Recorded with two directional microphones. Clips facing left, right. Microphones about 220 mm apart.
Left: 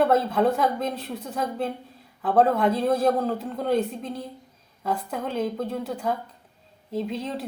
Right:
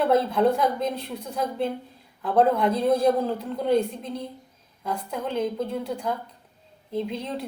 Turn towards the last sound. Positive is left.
turn(degrees=0)  # may be behind; listen again after turning